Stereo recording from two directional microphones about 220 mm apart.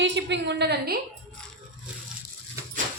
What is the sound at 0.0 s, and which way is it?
Speech, 55° right (ahead or behind).